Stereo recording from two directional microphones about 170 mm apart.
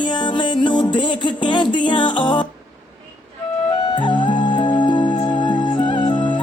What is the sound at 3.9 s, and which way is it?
Music, 25° left (ahead or behind).